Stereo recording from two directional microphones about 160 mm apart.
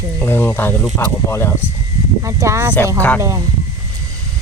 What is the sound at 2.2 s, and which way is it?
Speech, 20° right (ahead or behind).